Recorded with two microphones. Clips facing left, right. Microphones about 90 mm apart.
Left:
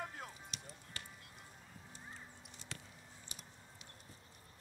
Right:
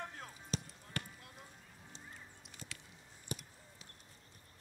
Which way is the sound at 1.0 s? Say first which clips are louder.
Right 9 dB; 55° right (ahead or behind).